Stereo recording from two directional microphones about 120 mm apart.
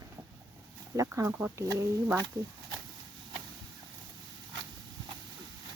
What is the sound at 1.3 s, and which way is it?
Speech, 15° right (ahead or behind).